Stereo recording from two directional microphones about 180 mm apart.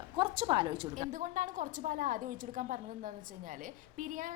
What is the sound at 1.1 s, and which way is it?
A woman's voice, 45° right (ahead or behind).